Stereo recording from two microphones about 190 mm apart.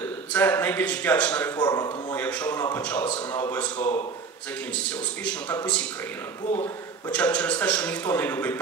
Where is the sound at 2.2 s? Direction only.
10° left (ahead or behind).